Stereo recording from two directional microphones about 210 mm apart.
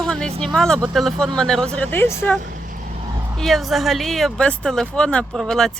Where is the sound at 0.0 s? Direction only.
5° left (ahead or behind).